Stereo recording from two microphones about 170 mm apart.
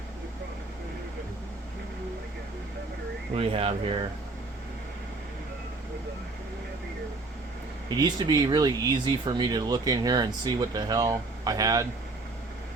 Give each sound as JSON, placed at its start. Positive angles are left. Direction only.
{"t": 3.3, "sound": "speech", "side_deg": -35}
{"t": 7.9, "sound": "speech", "side_deg": -25}